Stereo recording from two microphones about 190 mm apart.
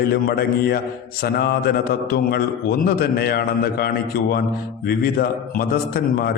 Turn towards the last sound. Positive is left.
turn(degrees=55)  # may be behind; listen again after turning